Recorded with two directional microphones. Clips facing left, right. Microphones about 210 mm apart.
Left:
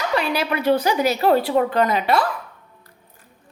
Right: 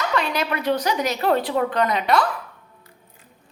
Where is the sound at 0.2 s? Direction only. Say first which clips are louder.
Left 2 dB; 10° left (ahead or behind).